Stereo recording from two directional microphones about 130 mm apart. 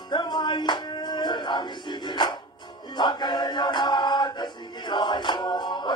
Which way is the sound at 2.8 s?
35° left (ahead or behind).